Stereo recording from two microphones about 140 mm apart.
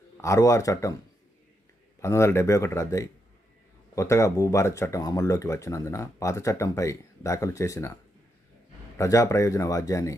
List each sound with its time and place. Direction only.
0.2 s speech: 20° left (ahead or behind)
2.0 s speech: 20° left (ahead or behind)
9.0 s speech: 25° left (ahead or behind)